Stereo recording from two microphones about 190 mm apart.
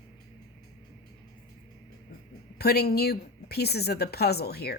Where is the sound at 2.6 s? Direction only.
55° left (ahead or behind).